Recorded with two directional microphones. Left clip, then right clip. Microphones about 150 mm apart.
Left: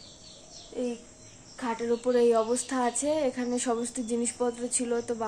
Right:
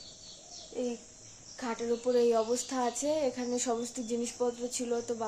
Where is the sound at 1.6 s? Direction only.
10° right (ahead or behind).